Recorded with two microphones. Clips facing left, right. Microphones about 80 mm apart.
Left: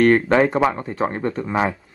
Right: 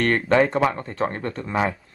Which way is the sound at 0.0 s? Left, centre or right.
Centre.